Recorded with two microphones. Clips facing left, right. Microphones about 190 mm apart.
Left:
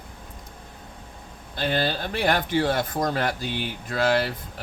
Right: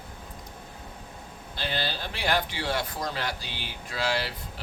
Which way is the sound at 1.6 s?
50° left (ahead or behind).